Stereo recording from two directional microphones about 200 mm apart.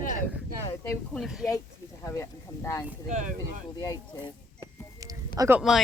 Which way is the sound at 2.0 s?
15° left (ahead or behind).